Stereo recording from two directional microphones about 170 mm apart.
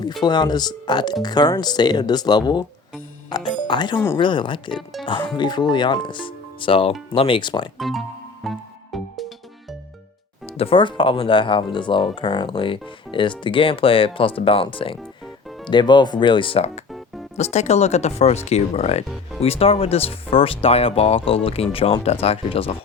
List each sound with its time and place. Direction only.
0.2 s speech: 25° left (ahead or behind)
3.2 s music: 25° left (ahead or behind)
3.7 s speech: 25° left (ahead or behind)
7.8 s speech: centre (ahead or behind)
8.4 s music: centre (ahead or behind)
10.4 s speech: 35° left (ahead or behind)